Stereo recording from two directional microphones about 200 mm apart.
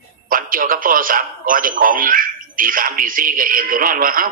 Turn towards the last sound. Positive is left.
turn(degrees=-45)  # may be behind; listen again after turning